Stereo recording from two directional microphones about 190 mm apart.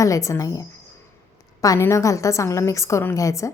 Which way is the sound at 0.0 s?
15° left (ahead or behind).